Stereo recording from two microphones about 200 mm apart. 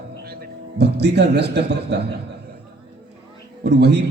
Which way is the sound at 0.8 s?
55° right (ahead or behind).